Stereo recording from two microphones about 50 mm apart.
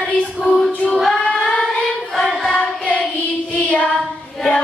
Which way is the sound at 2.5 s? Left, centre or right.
Left.